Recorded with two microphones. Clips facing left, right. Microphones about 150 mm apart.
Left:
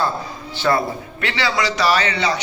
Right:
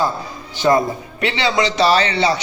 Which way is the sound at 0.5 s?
15° right (ahead or behind).